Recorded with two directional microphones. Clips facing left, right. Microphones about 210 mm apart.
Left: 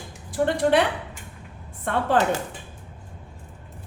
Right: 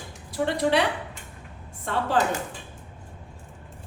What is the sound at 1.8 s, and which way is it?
Speech, 55° left (ahead or behind).